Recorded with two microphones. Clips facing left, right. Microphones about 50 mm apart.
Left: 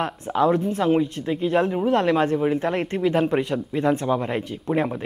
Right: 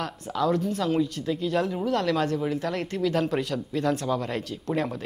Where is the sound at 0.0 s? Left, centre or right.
Left.